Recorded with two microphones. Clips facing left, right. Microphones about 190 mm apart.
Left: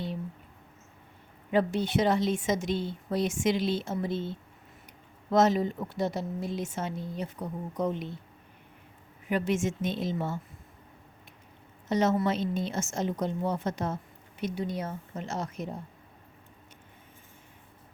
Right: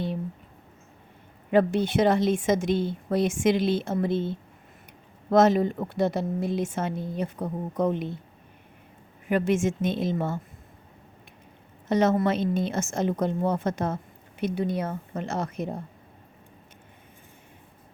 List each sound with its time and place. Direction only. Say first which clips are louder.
1.5 s speech: right 5 dB; 55° right (ahead or behind)
5.3 s speech: right 4 dB; 55° right (ahead or behind)
9.3 s speech: right 4 dB; 50° right (ahead or behind)
11.9 s speech: right 4 dB; 55° right (ahead or behind)